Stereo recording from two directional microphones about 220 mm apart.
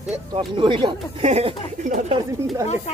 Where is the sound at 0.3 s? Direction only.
20° right (ahead or behind).